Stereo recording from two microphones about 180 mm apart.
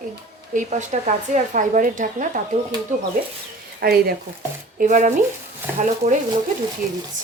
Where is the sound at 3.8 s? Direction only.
55° right (ahead or behind).